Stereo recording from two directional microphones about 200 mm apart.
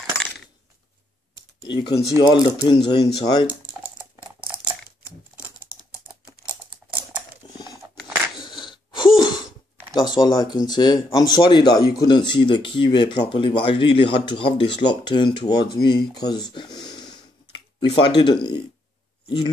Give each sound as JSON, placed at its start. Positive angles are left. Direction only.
{"t": 1.3, "sound": "computer keyboard", "side_deg": 20}
{"t": 2.1, "sound": "speech", "side_deg": 20}
{"t": 6.4, "sound": "computer keyboard", "side_deg": -5}
{"t": 7.4, "sound": "a sound", "side_deg": 20}
{"t": 9.9, "sound": "speech", "side_deg": 20}